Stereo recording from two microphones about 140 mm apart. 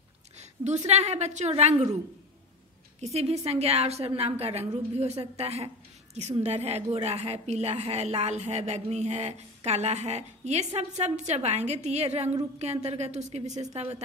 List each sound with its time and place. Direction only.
0.4 s a woman's voice: 55° right (ahead or behind)
3.0 s a woman's voice: 50° right (ahead or behind)